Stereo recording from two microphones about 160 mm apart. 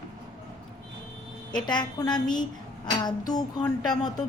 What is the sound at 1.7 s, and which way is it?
A woman's voice, 25° left (ahead or behind).